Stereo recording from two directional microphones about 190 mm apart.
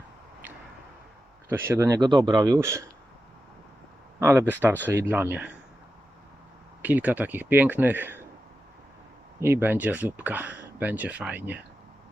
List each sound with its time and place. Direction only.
1.5 s speech: 10° right (ahead or behind)
4.2 s speech: 15° right (ahead or behind)
6.8 s speech: 10° right (ahead or behind)
9.4 s speech: 10° right (ahead or behind)